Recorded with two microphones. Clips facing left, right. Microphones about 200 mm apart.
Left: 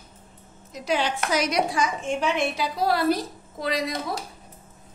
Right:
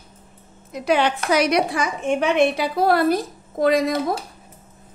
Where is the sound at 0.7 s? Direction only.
60° right (ahead or behind).